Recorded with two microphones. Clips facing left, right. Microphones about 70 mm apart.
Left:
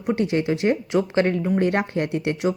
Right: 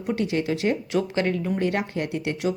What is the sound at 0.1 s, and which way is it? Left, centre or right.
Speech, left.